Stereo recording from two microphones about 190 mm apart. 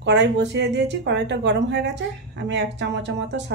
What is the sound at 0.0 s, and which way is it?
Speech, 65° right (ahead or behind).